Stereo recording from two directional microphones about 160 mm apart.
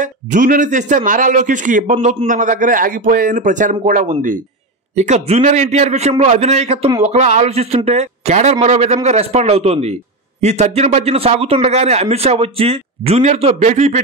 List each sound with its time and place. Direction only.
0.0 s a man's voice: 55° right (ahead or behind)